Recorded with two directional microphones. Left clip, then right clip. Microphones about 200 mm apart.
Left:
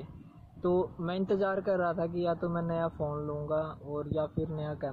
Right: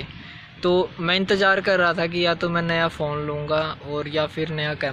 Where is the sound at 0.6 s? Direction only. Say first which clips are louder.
Right 9 dB; 25° right (ahead or behind).